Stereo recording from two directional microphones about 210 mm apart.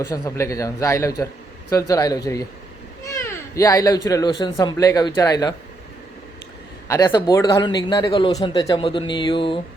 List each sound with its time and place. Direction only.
0.0 s speech: 15° left (ahead or behind)
6.8 s a man's voice: 15° left (ahead or behind)